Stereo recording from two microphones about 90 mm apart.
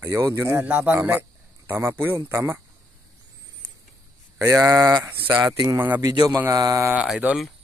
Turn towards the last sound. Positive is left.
turn(degrees=-20)  # may be behind; listen again after turning